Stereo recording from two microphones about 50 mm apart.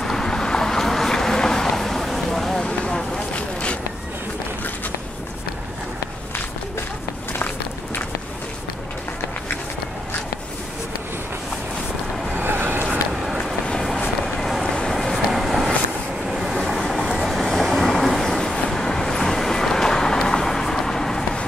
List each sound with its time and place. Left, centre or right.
0.0 s vehicle: centre
12.4 s vehicle: right
14.2 s vehicle: centre